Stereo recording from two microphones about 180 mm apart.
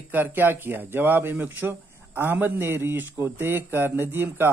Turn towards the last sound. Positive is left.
turn(degrees=-10)  # may be behind; listen again after turning